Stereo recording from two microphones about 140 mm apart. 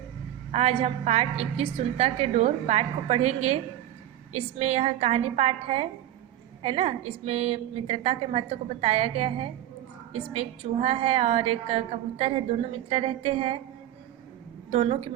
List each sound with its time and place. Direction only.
0.5 s a woman's voice: 45° right (ahead or behind)
14.7 s a woman's voice: 50° right (ahead or behind)